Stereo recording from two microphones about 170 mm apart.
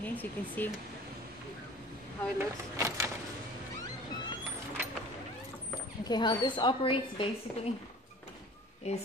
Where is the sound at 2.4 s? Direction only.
20° right (ahead or behind).